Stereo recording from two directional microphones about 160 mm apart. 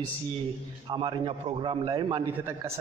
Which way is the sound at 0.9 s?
30° right (ahead or behind).